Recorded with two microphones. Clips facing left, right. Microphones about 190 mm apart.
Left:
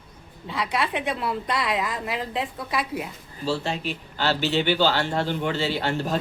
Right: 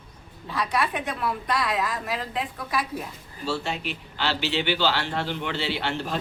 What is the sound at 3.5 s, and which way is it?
A man's voice, 40° left (ahead or behind).